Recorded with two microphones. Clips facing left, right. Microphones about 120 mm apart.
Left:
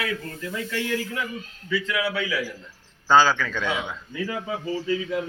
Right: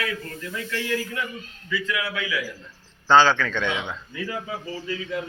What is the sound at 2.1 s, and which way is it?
Speech, 30° left (ahead or behind).